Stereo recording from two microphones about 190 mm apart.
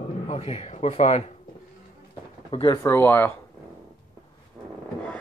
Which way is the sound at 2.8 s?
10° left (ahead or behind).